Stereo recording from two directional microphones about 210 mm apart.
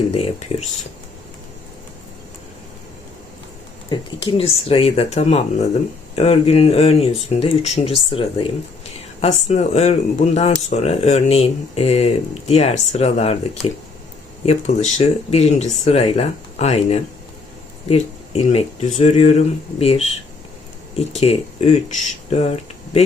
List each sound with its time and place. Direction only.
3.8 s speech: 25° left (ahead or behind)
21.1 s speech: 30° left (ahead or behind)